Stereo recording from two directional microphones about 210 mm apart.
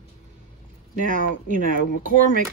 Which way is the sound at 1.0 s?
40° right (ahead or behind).